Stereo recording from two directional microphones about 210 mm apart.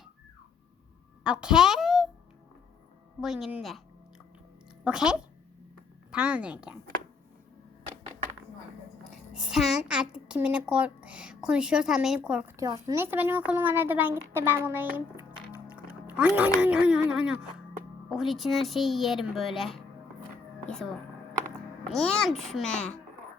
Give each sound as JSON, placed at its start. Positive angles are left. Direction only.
{"t": 1.2, "sound": "a woman's voice", "side_deg": -5}
{"t": 3.2, "sound": "speech", "side_deg": 0}
{"t": 4.8, "sound": "speech", "side_deg": -5}
{"t": 9.0, "sound": "a child's voice", "side_deg": -5}
{"t": 20.7, "sound": "speech", "side_deg": 5}
{"t": 21.9, "sound": "speech", "side_deg": 0}